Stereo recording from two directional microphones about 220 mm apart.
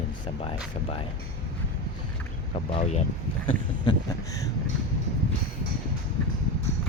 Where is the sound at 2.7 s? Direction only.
30° left (ahead or behind).